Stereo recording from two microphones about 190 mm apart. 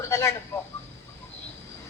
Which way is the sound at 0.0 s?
15° left (ahead or behind).